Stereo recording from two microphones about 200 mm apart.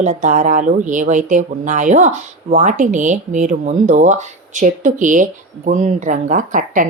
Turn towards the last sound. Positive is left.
turn(degrees=-40)  # may be behind; listen again after turning